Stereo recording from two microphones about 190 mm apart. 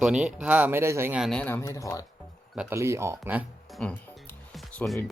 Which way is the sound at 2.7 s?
15° right (ahead or behind).